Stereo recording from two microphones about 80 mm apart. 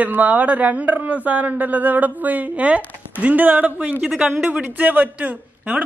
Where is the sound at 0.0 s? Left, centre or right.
Centre.